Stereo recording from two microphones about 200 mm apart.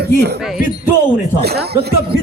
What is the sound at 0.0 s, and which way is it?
Speech, 55° right (ahead or behind).